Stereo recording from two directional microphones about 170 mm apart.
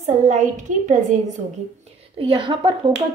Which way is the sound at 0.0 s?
45° right (ahead or behind).